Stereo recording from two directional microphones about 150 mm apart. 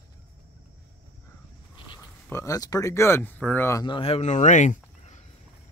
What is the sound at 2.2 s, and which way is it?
Speech, 20° left (ahead or behind).